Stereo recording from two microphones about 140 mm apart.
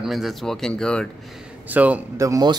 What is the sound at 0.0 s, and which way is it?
Speech, centre (ahead or behind).